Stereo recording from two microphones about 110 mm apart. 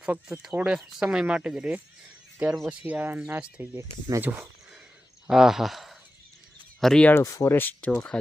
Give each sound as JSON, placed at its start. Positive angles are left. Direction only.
{"t": 0.0, "sound": "speech", "side_deg": -5}
{"t": 5.3, "sound": "speech", "side_deg": -5}
{"t": 7.1, "sound": "speech", "side_deg": 25}
{"t": 7.9, "sound": "speech", "side_deg": 10}